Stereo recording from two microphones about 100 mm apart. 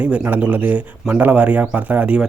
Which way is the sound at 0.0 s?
15° right (ahead or behind).